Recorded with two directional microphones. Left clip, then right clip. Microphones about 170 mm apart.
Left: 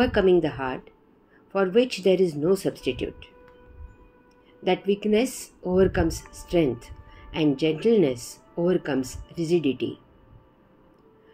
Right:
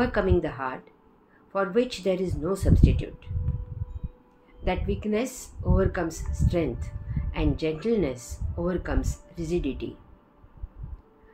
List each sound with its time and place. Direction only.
0.0 s speech: 35° left (ahead or behind)
4.6 s speech: 35° left (ahead or behind)